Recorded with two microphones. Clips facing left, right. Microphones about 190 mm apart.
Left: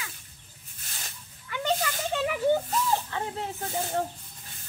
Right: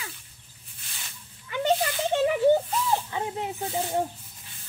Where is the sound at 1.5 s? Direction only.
25° right (ahead or behind).